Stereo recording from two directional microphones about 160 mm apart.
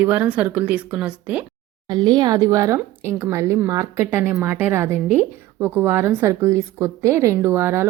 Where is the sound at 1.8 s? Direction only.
25° right (ahead or behind).